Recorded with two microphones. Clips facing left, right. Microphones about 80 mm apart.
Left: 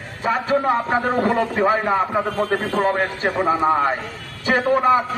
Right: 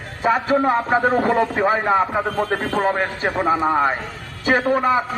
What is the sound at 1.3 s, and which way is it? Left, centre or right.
Speech, centre.